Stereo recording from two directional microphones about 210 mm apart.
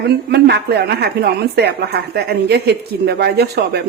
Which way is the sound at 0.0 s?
50° right (ahead or behind).